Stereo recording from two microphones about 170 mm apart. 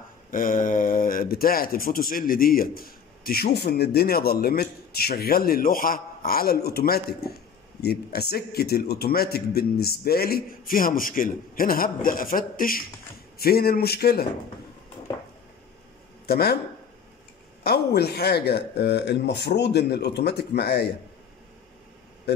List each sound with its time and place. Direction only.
0.3 s speech: 55° left (ahead or behind)
16.3 s speech: 65° left (ahead or behind)
17.6 s speech: 70° left (ahead or behind)